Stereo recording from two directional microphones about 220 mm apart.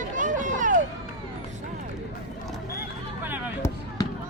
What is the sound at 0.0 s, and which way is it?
Run, 35° right (ahead or behind).